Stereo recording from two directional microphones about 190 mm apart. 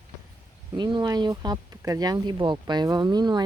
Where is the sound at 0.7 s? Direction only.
25° right (ahead or behind).